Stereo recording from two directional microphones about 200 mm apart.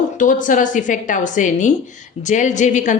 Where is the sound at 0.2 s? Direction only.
40° left (ahead or behind).